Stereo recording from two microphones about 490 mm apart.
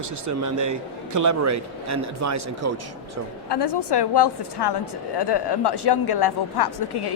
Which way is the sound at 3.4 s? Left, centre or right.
Left.